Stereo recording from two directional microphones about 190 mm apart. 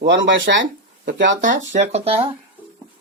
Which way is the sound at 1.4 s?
40° right (ahead or behind).